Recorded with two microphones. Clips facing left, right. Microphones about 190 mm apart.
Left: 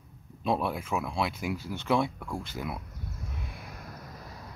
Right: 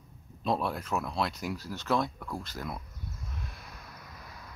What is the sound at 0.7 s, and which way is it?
Speech, 5° left (ahead or behind).